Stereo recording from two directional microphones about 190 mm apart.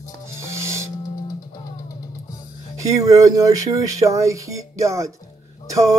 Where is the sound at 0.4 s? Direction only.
15° right (ahead or behind).